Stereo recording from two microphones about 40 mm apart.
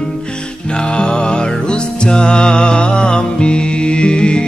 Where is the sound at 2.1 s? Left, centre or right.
Left.